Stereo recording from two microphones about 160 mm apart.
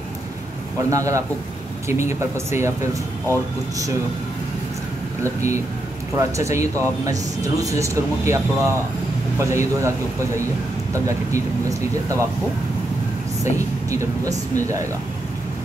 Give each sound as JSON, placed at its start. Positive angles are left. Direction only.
{"t": 0.8, "sound": "speech", "side_deg": -20}
{"t": 2.3, "sound": "speech", "side_deg": -15}
{"t": 5.2, "sound": "speech", "side_deg": -20}
{"t": 13.4, "sound": "speech", "side_deg": -20}